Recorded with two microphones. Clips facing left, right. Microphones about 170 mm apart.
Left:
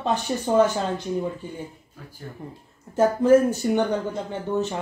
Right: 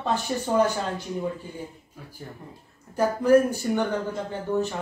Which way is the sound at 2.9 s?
25° left (ahead or behind).